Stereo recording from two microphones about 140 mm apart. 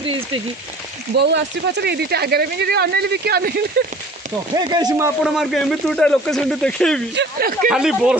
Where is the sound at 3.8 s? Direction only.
90° right.